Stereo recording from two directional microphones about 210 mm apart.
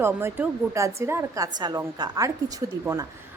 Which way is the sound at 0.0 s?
10° right (ahead or behind).